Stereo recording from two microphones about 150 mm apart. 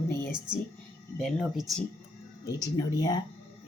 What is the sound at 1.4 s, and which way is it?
Speech, 5° right (ahead or behind).